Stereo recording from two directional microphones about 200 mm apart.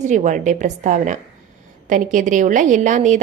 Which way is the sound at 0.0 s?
35° right (ahead or behind).